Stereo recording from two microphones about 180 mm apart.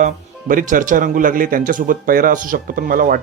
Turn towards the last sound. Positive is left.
turn(degrees=-50)  # may be behind; listen again after turning